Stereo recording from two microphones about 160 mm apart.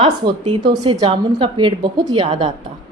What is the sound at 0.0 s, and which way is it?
Speech, 35° right (ahead or behind).